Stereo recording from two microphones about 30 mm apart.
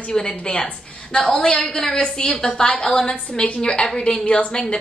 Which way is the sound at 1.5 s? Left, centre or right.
Left.